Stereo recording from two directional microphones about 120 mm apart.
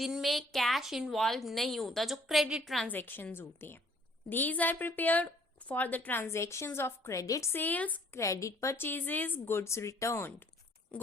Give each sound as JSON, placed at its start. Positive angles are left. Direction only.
{"t": 0.0, "sound": "a woman's voice", "side_deg": 0}
{"t": 2.9, "sound": "a woman's voice", "side_deg": 15}
{"t": 8.2, "sound": "speech", "side_deg": 25}
{"t": 10.9, "sound": "oink", "side_deg": 10}